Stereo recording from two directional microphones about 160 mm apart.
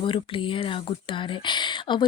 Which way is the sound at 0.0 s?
30° left (ahead or behind).